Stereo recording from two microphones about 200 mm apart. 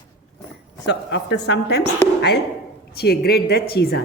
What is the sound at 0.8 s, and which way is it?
A woman's voice, 60° left (ahead or behind).